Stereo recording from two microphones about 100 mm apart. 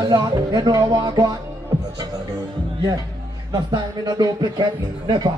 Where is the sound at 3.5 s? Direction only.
45° right (ahead or behind).